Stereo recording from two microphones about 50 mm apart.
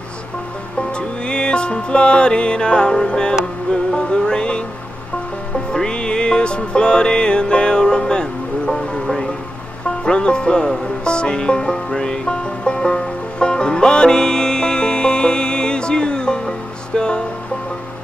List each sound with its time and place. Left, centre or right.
0.7 s music: centre
5.7 s music: centre